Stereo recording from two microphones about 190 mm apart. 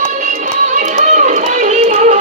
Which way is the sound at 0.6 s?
40° right (ahead or behind).